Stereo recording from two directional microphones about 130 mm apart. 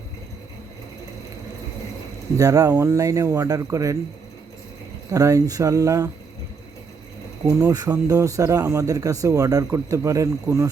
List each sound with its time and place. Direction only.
2.4 s speech: 25° right (ahead or behind)
5.1 s speech: 25° right (ahead or behind)
7.4 s speech: 25° right (ahead or behind)